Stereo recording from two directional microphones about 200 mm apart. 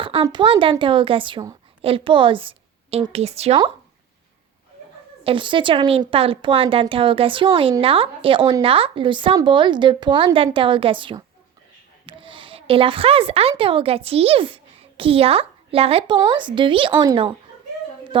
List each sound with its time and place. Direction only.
0.0 s a woman's voice: 25° right (ahead or behind)
5.2 s a woman's voice: 25° right (ahead or behind)